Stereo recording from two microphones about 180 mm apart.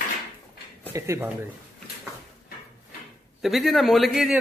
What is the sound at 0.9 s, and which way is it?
Speech, 15° right (ahead or behind).